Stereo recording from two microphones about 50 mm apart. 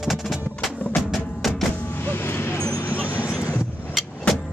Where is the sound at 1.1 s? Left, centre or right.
Centre.